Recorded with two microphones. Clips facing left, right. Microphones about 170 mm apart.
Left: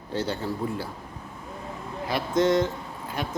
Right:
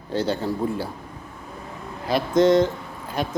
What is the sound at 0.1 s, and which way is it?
Speech, 35° right (ahead or behind).